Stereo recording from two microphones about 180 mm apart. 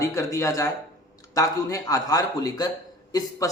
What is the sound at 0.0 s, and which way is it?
A man's voice, 15° left (ahead or behind).